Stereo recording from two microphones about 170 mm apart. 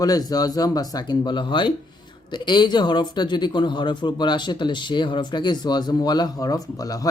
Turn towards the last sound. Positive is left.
turn(degrees=20)  # may be behind; listen again after turning